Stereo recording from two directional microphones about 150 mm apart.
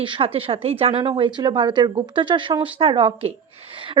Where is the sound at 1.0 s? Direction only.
30° right (ahead or behind).